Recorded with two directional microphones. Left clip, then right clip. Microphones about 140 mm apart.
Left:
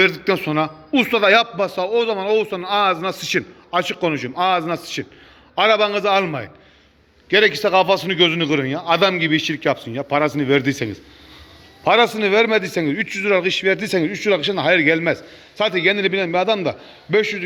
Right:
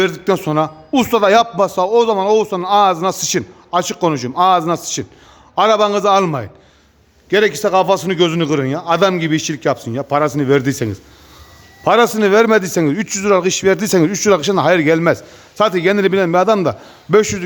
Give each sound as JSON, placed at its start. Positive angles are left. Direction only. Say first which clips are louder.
{"t": 0.0, "sound": "a man's voice", "louder": "right 1 dB", "side_deg": -40}